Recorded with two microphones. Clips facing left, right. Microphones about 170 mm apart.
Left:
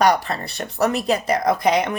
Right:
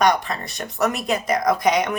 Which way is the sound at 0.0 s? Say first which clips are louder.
Left 1 dB; 35° left (ahead or behind).